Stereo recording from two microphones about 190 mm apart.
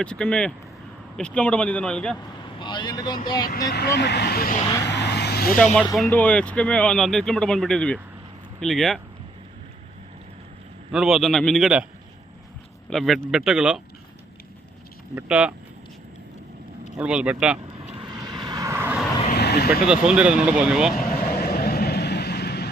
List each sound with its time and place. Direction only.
0.0 s speech: 5° left (ahead or behind)
2.6 s speech: 25° left (ahead or behind)
3.7 s speech: 60° left (ahead or behind)
4.8 s vehicle: 65° left (ahead or behind)
5.8 s speech: centre (ahead or behind)
10.9 s speech: centre (ahead or behind)
12.9 s speech: centre (ahead or behind)
15.1 s speech: 10° right (ahead or behind)
17.0 s speech: 5° right (ahead or behind)
17.8 s vehicle: 20° right (ahead or behind)
19.3 s vehicle: 60° left (ahead or behind)
19.8 s speech: 5° right (ahead or behind)
21.1 s vehicle: 55° left (ahead or behind)